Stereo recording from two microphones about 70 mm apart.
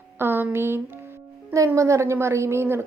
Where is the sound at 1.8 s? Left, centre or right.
Right.